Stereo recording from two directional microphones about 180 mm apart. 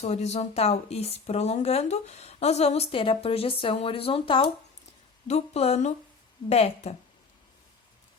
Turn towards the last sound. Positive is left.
turn(degrees=35)  # may be behind; listen again after turning